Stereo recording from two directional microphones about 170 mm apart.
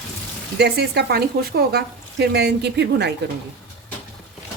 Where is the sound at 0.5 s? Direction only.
75° right (ahead or behind).